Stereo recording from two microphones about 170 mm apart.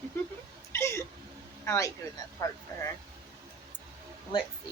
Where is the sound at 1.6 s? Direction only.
15° left (ahead or behind).